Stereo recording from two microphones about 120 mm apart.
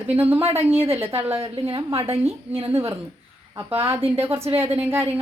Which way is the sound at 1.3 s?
45° right (ahead or behind).